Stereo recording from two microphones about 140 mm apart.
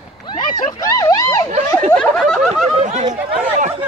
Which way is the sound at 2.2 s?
Centre (ahead or behind).